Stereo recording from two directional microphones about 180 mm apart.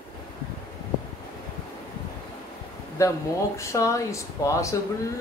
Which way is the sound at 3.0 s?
15° left (ahead or behind).